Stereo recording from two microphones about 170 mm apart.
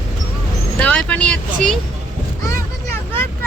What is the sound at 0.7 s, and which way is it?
Speech, 5° left (ahead or behind).